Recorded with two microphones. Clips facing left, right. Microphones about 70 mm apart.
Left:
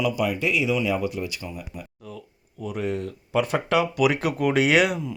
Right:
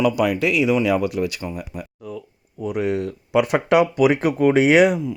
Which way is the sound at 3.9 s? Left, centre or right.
Right.